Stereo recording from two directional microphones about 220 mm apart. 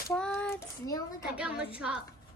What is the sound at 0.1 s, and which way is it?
Child singing, 5° left (ahead or behind).